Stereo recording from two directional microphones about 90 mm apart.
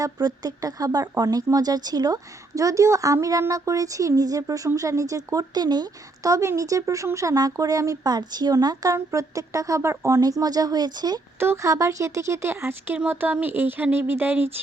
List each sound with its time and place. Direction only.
0.0 s speech: 45° right (ahead or behind)
11.3 s speech: 30° right (ahead or behind)